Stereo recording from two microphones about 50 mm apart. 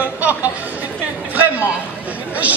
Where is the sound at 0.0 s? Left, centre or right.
Right.